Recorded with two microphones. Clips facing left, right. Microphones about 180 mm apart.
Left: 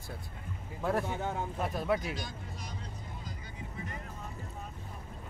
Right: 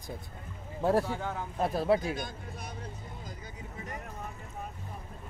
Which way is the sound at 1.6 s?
30° right (ahead or behind).